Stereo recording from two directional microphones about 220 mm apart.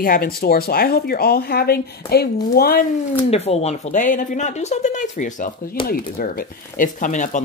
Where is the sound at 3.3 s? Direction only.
30° left (ahead or behind).